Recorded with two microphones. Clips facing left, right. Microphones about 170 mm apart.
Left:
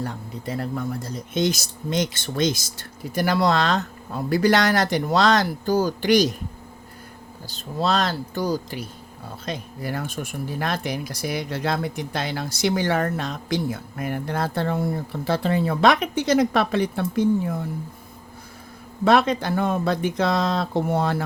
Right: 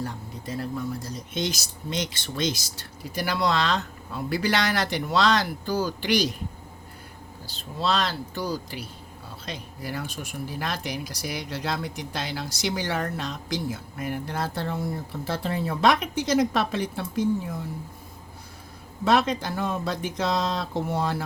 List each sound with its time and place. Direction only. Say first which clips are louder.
0.0 s speech: left 3 dB; 60° left (ahead or behind)
7.4 s speech: left 3 dB; 45° left (ahead or behind)
19.0 s speech: left 4 dB; 60° left (ahead or behind)